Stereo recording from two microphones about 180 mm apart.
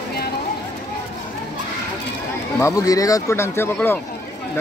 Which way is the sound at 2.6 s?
20° left (ahead or behind).